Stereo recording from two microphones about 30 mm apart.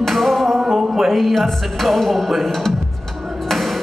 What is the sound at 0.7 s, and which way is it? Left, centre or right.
Music, centre.